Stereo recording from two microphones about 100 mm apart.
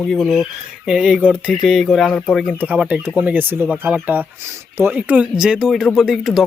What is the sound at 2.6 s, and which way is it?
Speech, 15° right (ahead or behind).